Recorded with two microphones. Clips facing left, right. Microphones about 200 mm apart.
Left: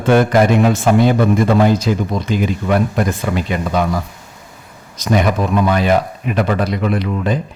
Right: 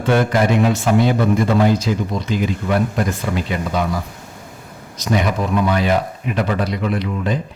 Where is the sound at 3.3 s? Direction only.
55° left (ahead or behind).